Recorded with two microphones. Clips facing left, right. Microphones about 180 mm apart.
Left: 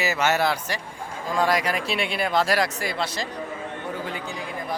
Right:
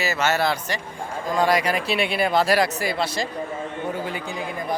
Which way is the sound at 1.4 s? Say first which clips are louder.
Right 2 dB; centre (ahead or behind).